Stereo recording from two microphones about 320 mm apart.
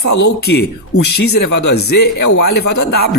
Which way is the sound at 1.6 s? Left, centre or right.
Left.